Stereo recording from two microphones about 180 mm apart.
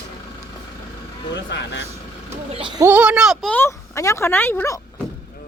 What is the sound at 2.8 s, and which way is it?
Speech, 10° right (ahead or behind).